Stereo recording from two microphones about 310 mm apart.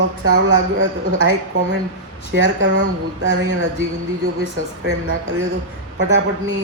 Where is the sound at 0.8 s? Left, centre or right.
Right.